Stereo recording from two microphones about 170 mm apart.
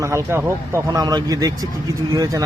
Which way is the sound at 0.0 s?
15° right (ahead or behind).